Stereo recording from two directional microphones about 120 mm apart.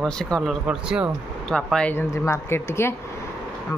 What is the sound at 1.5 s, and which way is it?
Speech, 5° left (ahead or behind).